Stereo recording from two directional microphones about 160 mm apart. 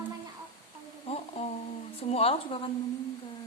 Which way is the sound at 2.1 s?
40° left (ahead or behind).